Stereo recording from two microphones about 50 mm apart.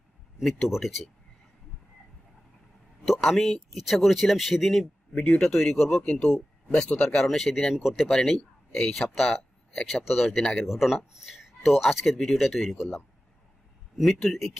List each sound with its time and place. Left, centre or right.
0.4 s speech: centre
3.1 s speech: centre
5.1 s speech: left
5.4 s speech: centre
6.0 s speech: left
7.0 s speech: centre
7.2 s speech: centre
9.1 s speech: centre